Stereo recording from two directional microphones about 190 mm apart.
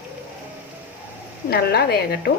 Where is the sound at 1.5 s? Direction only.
55° left (ahead or behind).